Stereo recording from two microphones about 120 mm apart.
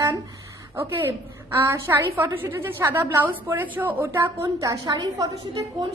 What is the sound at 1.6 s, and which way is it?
A woman's voice, 20° right (ahead or behind).